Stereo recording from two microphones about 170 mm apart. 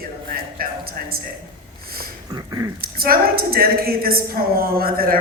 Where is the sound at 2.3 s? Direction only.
20° right (ahead or behind).